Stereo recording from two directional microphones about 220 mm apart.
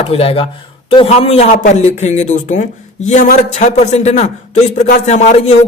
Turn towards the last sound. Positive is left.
turn(degrees=35)  # may be behind; listen again after turning